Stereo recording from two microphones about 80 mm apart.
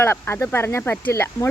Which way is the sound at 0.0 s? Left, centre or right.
Left.